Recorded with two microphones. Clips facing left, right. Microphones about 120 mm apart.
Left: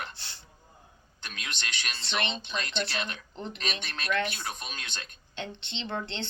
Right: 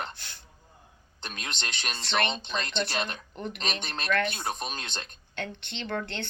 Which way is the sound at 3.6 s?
45° right (ahead or behind).